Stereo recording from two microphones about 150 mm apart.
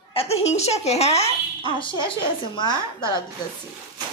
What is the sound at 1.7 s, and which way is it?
Speech, 35° left (ahead or behind).